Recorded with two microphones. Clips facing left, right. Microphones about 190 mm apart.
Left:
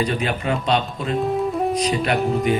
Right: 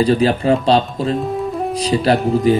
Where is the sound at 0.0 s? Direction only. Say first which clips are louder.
Right 8 dB; 30° right (ahead or behind).